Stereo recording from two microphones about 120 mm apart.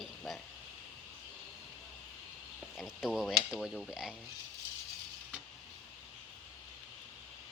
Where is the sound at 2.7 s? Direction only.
5° right (ahead or behind).